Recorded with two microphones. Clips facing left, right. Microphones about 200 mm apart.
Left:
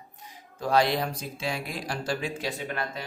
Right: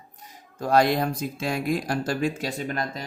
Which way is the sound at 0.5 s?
45° right (ahead or behind).